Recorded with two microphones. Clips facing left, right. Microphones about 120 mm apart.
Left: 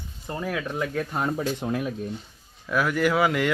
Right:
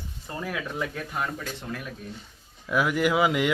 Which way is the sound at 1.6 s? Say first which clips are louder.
Left 8 dB; 45° left (ahead or behind).